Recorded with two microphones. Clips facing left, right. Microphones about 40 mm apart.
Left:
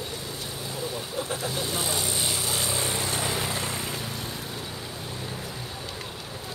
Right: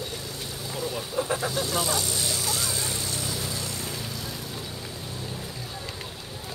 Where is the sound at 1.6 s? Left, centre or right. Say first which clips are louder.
Right 2 dB; left.